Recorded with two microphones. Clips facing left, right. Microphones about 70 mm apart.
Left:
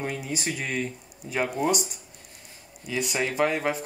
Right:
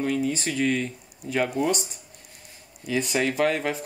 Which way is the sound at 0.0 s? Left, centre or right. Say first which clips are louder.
Right 5 dB; centre.